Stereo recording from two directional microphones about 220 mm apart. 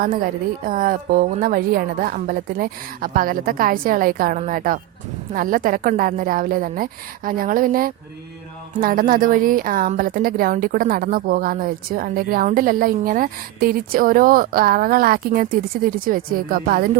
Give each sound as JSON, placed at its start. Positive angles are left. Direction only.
{"t": 0.0, "sound": "a woman's voice", "side_deg": -40}